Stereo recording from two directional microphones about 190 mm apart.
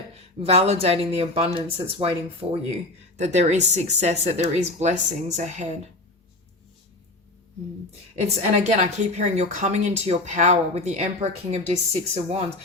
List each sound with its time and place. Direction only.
0.2 s a woman's voice: 30° right (ahead or behind)
8.1 s a woman's voice: 35° right (ahead or behind)